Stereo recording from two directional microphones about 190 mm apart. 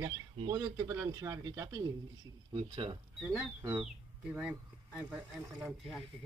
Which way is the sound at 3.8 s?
5° right (ahead or behind).